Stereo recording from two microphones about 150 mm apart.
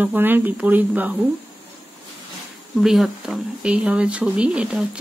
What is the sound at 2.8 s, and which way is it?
Speech, 5° right (ahead or behind).